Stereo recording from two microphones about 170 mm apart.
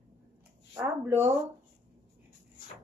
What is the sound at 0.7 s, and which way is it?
Speech, 15° right (ahead or behind).